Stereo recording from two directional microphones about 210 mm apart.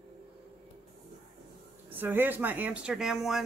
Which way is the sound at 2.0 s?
10° right (ahead or behind).